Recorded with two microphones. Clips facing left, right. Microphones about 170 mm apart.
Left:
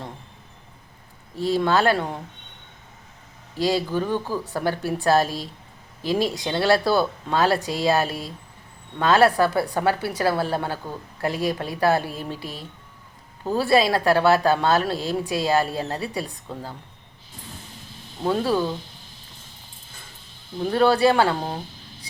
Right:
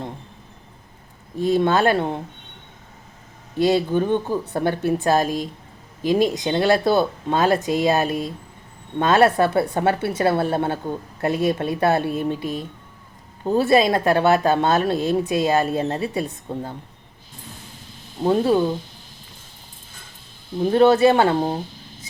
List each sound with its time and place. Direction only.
1.4 s speech: 20° right (ahead or behind)
3.6 s speech: 20° right (ahead or behind)
18.2 s speech: 20° right (ahead or behind)
20.7 s speech: 20° right (ahead or behind)